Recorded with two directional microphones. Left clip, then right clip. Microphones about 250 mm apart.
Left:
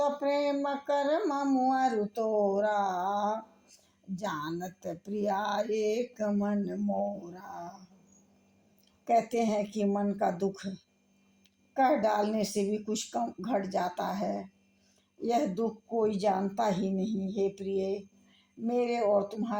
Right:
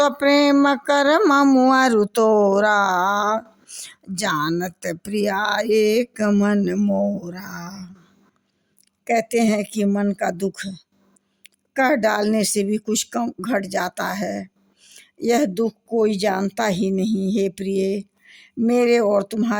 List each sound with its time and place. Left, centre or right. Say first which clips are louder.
0.0 s speech: right 12 dB; right
9.0 s speech: right 8 dB; right